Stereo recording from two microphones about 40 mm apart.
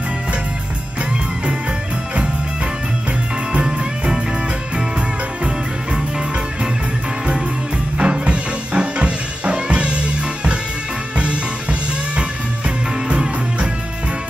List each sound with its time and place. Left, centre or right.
3.5 s music: right
8.0 s music: right
12.2 s music: right